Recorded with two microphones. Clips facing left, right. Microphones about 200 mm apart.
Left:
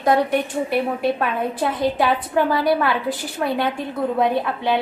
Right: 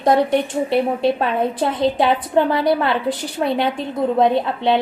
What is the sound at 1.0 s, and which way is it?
A woman's voice, 25° right (ahead or behind).